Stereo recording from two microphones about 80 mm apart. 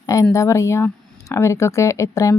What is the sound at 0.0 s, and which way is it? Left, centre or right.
Speech, left.